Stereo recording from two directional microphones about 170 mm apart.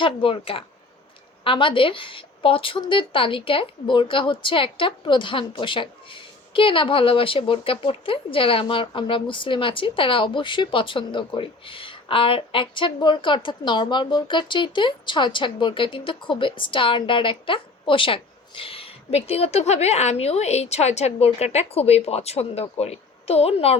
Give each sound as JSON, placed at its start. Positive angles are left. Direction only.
{"t": 0.0, "sound": "a woman's voice", "side_deg": 30}